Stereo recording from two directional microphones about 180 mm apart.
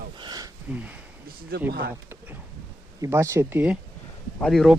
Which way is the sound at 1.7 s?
55° right (ahead or behind).